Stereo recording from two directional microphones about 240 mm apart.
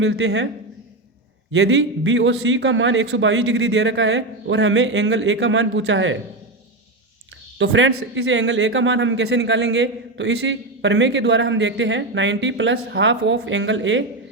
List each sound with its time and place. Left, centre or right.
0.0 s speech: right
1.5 s speech: right
7.6 s speech: right